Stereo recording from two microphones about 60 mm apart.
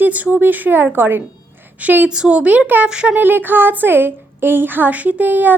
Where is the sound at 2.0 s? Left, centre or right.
Centre.